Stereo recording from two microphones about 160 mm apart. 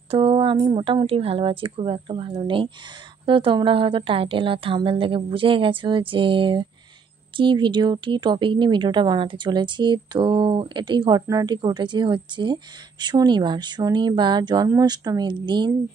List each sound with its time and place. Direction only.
0.1 s a woman's voice: 35° right (ahead or behind)